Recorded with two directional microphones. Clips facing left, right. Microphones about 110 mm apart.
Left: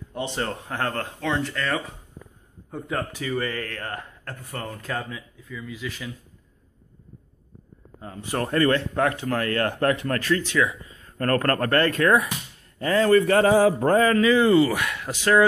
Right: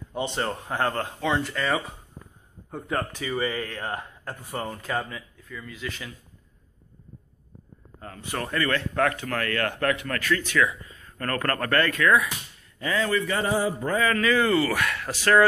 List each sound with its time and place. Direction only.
0.1 s speech: centre (ahead or behind)
3.3 s speech: 10° right (ahead or behind)
8.3 s speech: 35° left (ahead or behind)
11.1 s speech: 35° left (ahead or behind); by 13.5 s 55° left (ahead or behind)
13.5 s mantra: 90° left
14.0 s speech: 25° left (ahead or behind)